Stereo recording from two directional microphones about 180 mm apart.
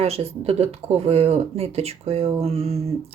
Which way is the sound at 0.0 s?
35° right (ahead or behind).